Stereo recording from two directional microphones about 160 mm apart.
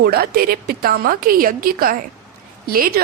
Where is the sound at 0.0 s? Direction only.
75° right (ahead or behind).